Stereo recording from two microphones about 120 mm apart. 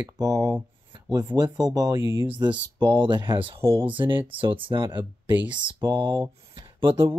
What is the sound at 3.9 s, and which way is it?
Speech, 45° right (ahead or behind).